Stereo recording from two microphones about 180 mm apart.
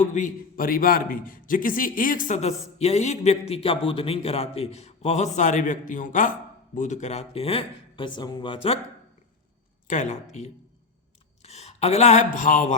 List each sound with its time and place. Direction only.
0.0 s a man's voice: 45° left (ahead or behind)
9.8 s speech: 45° left (ahead or behind)
11.4 s speech: 35° left (ahead or behind)